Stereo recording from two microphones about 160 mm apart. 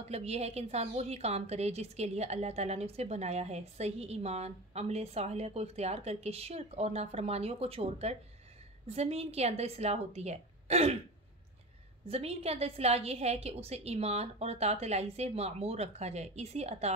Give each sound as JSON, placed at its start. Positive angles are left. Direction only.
{"t": 0.0, "sound": "a woman's voice", "side_deg": -40}
{"t": 12.1, "sound": "a woman's voice", "side_deg": -40}